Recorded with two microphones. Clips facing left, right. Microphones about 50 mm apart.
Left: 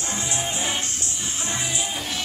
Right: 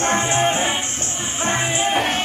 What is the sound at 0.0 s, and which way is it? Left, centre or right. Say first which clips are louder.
Music: right 11 dB; right.